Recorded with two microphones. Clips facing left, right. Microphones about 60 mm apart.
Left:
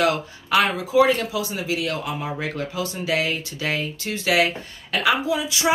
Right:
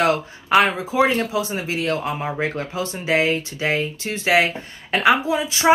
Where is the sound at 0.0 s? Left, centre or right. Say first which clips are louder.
Right 2 dB; right.